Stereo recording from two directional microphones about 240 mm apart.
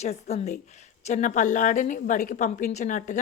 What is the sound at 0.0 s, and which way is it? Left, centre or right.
A woman's voice, left.